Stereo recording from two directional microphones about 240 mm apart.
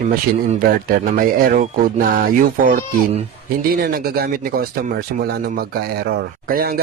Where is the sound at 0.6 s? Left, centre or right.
Right.